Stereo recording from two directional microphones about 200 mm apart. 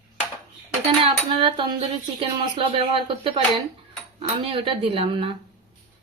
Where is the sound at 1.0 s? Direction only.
25° right (ahead or behind).